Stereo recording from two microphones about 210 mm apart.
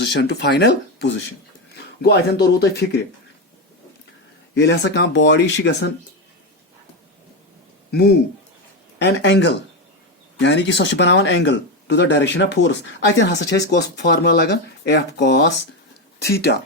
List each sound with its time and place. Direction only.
0.1 s speech: 55° left (ahead or behind)
4.5 s speech: 55° left (ahead or behind)
7.9 s speech: 50° left (ahead or behind)